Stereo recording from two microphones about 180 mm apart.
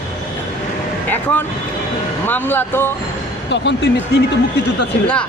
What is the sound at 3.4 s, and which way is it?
Speech, 75° left (ahead or behind).